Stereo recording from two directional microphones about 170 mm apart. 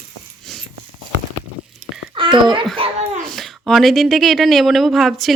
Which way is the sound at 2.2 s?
30° right (ahead or behind).